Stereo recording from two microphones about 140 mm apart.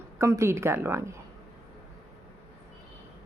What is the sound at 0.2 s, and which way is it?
A woman's voice, 20° right (ahead or behind).